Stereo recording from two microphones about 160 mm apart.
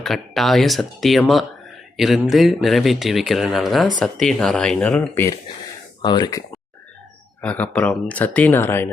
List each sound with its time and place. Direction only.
0.0 s speech: centre (ahead or behind)
6.0 s speech: 25° left (ahead or behind)
7.4 s speech: 10° left (ahead or behind)